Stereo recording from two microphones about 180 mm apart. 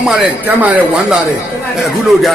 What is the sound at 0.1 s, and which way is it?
Speech, 10° right (ahead or behind).